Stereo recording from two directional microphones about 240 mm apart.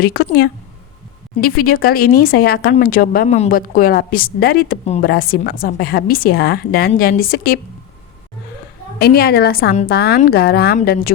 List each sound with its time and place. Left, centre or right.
0.0 s speech: left
1.4 s speech: left
9.0 s speech: left